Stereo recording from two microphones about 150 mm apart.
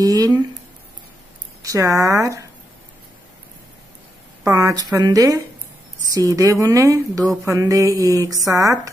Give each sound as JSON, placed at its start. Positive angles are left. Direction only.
{"t": 0.0, "sound": "speech", "side_deg": -25}
{"t": 1.6, "sound": "speech", "side_deg": -20}
{"t": 4.5, "sound": "speech", "side_deg": -20}